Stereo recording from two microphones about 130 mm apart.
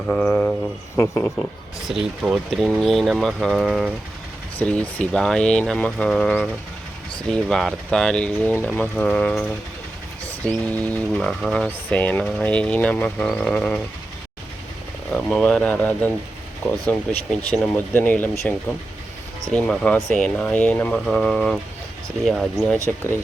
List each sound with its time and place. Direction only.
0.1 s speech: 10° left (ahead or behind)
0.9 s speech: 20° left (ahead or behind)
1.9 s speech: 10° right (ahead or behind)
4.5 s speech: 10° left (ahead or behind)
10.7 s speech: 10° left (ahead or behind)
15.1 s speech: 5° left (ahead or behind)